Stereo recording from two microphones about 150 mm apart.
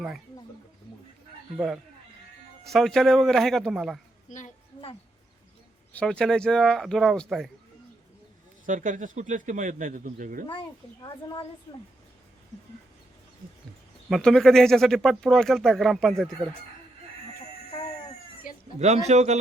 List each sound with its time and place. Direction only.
1.5 s speech: 5° right (ahead or behind)
4.3 s a sound: 55° left (ahead or behind)
5.9 s speech: 5° left (ahead or behind)
8.6 s speech: 60° right (ahead or behind)
11.0 s speech: 30° left (ahead or behind)
14.1 s speech: 5° left (ahead or behind)
18.5 s bleat: 70° left (ahead or behind)
18.8 s a man's voice: 50° right (ahead or behind)